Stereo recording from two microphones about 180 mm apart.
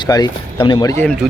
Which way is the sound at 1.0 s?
5° left (ahead or behind).